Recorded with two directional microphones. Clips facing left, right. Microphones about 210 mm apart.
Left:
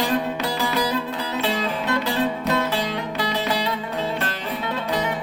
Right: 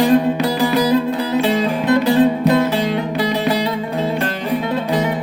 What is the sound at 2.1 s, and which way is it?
Music, 15° right (ahead or behind).